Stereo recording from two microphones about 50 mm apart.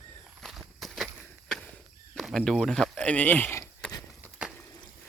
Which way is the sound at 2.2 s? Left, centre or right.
Centre.